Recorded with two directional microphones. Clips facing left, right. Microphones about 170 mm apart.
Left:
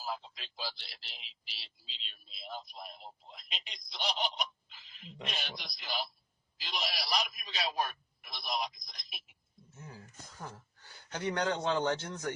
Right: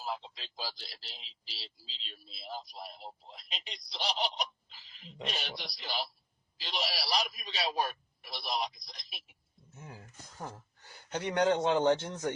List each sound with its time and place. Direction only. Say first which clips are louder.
0.0 s speech: right 1 dB; 25° right (ahead or behind)
6.6 s a sound: right 2 dB; 30° right (ahead or behind)
11.1 s a man's voice: right 5 dB; 20° right (ahead or behind)